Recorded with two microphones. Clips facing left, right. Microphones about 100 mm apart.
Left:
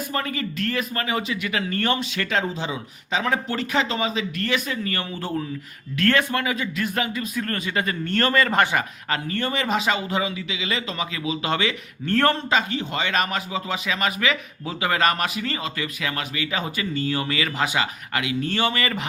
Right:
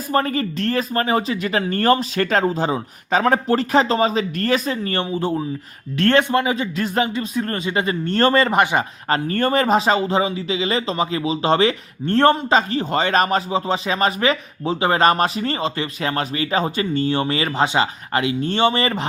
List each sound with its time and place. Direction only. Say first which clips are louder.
0.1 s speech: right 12 dB; 40° right (ahead or behind)
5.1 s a man's voice: right 6 dB; 20° right (ahead or behind)
8.4 s a man's voice: right 3 dB; 20° right (ahead or behind)
9.0 s speech: right 7 dB; 40° right (ahead or behind)